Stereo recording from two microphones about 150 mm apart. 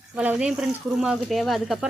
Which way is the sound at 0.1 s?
10° right (ahead or behind).